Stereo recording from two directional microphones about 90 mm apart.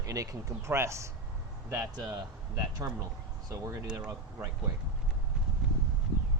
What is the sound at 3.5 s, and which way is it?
Speech, 40° right (ahead or behind).